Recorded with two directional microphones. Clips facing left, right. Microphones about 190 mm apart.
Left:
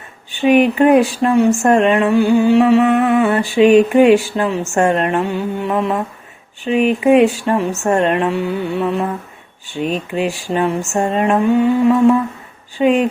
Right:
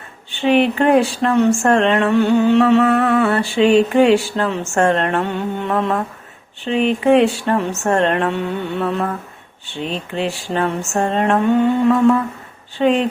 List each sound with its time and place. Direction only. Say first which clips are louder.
0.4 s music: left 3 dB; 15° left (ahead or behind)
3.1 s music: left 2 dB; 15° left (ahead or behind)